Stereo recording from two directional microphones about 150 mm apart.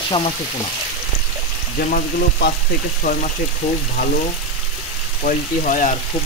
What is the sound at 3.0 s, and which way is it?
Speech, 65° left (ahead or behind).